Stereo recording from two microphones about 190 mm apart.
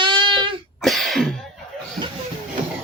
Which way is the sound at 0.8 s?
Centre (ahead or behind).